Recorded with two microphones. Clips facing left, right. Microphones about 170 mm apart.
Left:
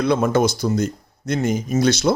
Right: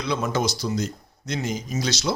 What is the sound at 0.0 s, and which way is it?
Speech, 50° left (ahead or behind).